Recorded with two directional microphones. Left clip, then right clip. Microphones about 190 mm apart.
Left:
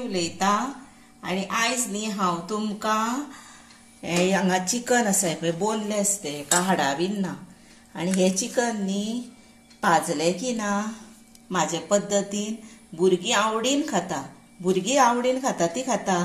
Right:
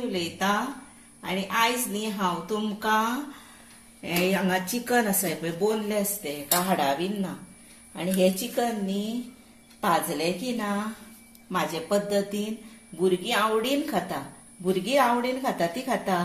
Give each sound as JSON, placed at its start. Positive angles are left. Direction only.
{"t": 0.1, "sound": "a woman's voice", "side_deg": 35}